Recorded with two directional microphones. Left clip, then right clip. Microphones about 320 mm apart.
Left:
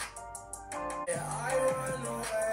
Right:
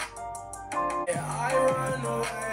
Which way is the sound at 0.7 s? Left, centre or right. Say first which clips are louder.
Right 7 dB; right.